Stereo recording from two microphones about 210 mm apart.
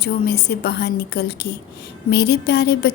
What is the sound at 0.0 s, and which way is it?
A woman's voice, 50° left (ahead or behind).